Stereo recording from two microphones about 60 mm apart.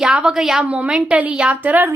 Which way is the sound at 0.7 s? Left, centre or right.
Centre.